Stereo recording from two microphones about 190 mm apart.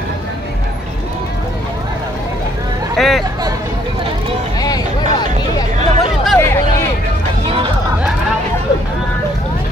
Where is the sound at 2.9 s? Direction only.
Centre (ahead or behind).